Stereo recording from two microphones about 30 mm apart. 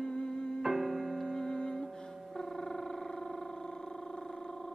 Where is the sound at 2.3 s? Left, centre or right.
Left.